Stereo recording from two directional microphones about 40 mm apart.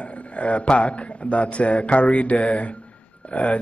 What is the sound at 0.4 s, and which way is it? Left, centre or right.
Speech, left.